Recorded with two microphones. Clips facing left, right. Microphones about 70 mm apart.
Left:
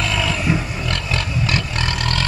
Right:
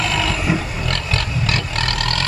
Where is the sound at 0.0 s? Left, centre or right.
Centre.